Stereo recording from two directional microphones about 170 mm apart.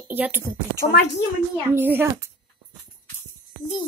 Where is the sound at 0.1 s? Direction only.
10° right (ahead or behind).